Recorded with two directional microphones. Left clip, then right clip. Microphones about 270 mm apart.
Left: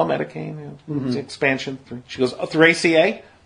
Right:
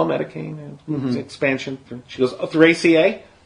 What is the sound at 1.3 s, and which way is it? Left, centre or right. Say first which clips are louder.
A man's voice: left 1 dB; left.